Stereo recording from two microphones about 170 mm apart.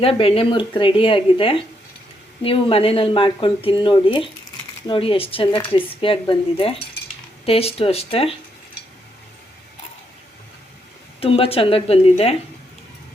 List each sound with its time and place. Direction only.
0.0 s speech: 35° left (ahead or behind)
11.2 s speech: 35° left (ahead or behind)